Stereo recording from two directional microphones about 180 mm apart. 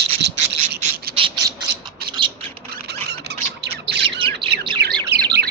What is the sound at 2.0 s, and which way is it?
Mechanisms, 60° right (ahead or behind).